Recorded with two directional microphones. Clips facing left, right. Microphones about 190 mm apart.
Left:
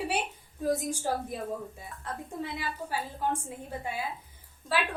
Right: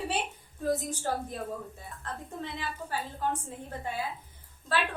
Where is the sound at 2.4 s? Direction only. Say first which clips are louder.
Left 3 dB; 10° left (ahead or behind).